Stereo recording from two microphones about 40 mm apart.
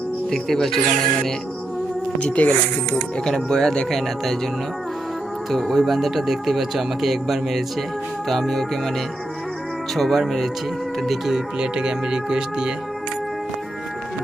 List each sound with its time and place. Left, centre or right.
0.3 s speech: centre
2.1 s speech: left
3.2 s speech: centre
5.5 s speech: centre
9.9 s speech: centre
11.3 s speech: centre